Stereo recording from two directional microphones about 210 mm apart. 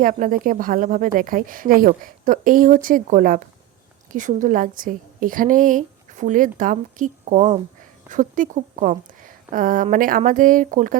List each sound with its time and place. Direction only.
0.0 s a woman's voice: 40° right (ahead or behind)